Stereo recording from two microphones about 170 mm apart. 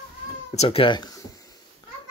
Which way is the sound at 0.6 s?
30° left (ahead or behind).